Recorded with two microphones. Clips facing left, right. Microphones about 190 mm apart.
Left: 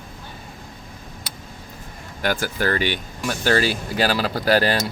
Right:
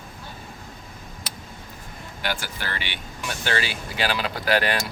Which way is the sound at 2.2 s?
45° left (ahead or behind).